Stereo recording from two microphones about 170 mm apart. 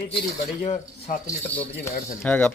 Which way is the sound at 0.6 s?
40° left (ahead or behind).